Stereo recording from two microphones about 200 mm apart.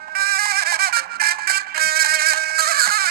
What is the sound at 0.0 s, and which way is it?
Music, 50° right (ahead or behind).